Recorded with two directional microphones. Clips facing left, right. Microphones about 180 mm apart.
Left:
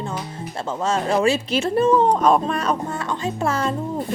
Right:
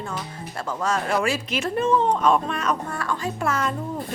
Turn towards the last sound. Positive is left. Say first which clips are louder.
# left 3 dB
turn(degrees=30)  # may be behind; listen again after turning